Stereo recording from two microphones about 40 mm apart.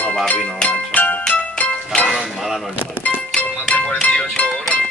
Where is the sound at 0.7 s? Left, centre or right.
Left.